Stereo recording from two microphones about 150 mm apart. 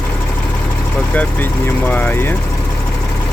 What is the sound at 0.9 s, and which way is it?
Speech, 10° left (ahead or behind).